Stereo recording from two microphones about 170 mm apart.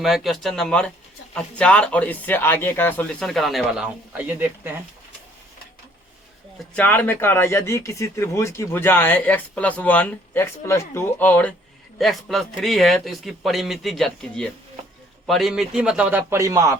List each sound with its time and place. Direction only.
0.0 s a man's voice: centre (ahead or behind)
6.7 s a man's voice: 10° left (ahead or behind); by 16.7 s 20° right (ahead or behind)